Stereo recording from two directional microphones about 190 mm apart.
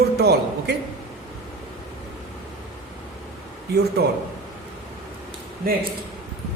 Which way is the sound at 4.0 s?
55° right (ahead or behind).